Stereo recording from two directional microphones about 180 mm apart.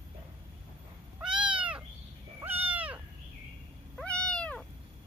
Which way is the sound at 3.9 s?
5° left (ahead or behind).